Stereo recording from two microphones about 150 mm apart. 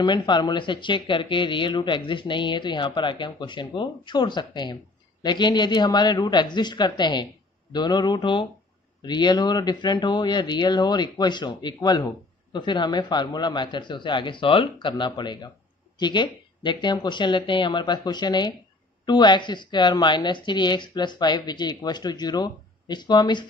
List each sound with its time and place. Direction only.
0.0 s a woman's voice: 30° left (ahead or behind)